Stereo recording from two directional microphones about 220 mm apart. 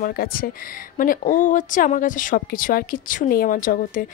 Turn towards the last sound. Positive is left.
turn(degrees=40)  # may be behind; listen again after turning